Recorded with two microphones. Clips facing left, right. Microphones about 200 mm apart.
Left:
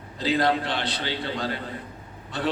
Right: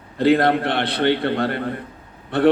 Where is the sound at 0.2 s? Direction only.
60° right (ahead or behind).